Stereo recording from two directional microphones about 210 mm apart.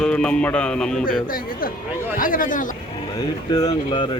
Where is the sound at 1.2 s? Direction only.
45° left (ahead or behind).